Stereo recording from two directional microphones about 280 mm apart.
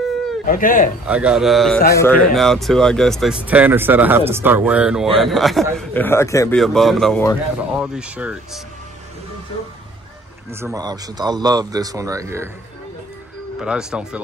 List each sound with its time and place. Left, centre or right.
0.5 s speech: left
1.0 s a man's voice: centre
6.6 s a man's voice: centre
10.5 s a man's voice: centre
13.6 s a man's voice: centre